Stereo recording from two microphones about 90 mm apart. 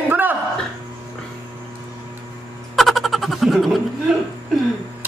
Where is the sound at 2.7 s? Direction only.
Centre (ahead or behind).